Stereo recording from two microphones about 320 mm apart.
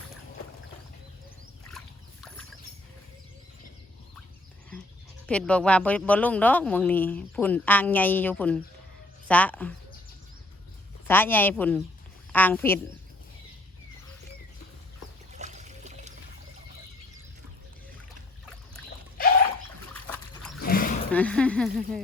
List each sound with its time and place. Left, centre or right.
2.2 s a sound: centre
5.2 s speech: centre
11.1 s speech: centre
15.3 s trickle: right
20.6 s a sound: left
21.1 s speech: centre